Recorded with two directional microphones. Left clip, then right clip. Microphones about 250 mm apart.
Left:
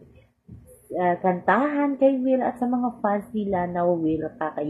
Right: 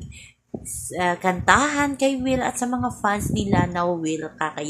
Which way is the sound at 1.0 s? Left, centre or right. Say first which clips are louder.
Even; right.